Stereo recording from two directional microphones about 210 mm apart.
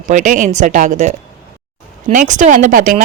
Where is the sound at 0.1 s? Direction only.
35° right (ahead or behind).